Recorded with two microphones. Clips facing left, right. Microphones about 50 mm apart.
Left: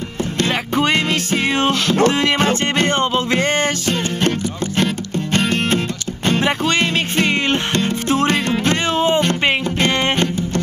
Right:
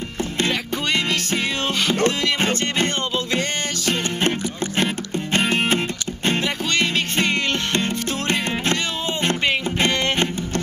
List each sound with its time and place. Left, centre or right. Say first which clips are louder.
0.5 s music: left 5 dB; left
3.0 s music: left 6 dB; left
3.9 s music: left 3 dB; centre
7.2 s music: left 4 dB; left